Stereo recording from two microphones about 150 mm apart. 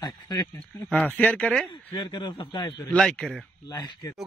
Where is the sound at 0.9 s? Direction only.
10° left (ahead or behind).